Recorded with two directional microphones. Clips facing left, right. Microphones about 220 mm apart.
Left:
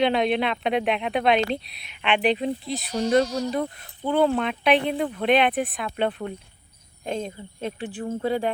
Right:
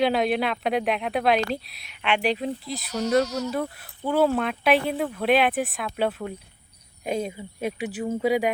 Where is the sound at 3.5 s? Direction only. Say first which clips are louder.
Left 1 dB; 5° right (ahead or behind).